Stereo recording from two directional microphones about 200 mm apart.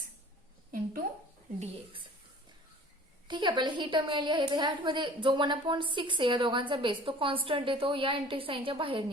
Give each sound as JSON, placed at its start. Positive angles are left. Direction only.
{"t": 1.5, "sound": "a woman's voice", "side_deg": -30}
{"t": 3.2, "sound": "a woman's voice", "side_deg": -25}